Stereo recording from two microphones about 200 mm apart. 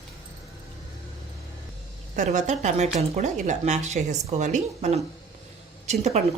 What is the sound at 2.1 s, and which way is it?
A woman's voice, 40° right (ahead or behind).